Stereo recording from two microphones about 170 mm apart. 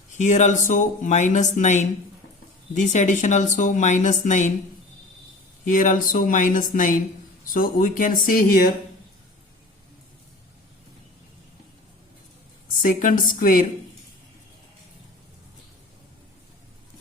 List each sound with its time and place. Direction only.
0.1 s a woman's voice: 45° left (ahead or behind)
5.6 s a woman's voice: 50° left (ahead or behind)
12.8 s a woman's voice: 50° left (ahead or behind)